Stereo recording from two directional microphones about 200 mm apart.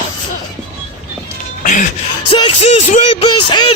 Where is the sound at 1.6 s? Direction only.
40° left (ahead or behind).